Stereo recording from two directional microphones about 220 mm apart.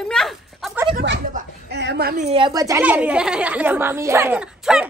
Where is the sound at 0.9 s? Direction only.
55° right (ahead or behind).